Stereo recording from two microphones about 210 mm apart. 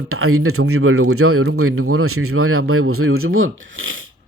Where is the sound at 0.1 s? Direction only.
90° right.